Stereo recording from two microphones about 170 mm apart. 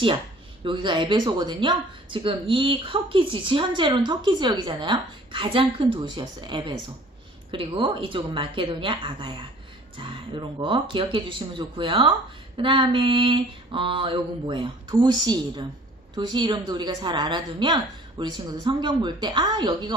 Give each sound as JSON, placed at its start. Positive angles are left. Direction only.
{"t": 0.6, "sound": "a woman's voice", "side_deg": -30}